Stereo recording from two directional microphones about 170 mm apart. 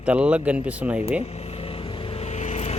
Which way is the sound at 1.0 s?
40° left (ahead or behind).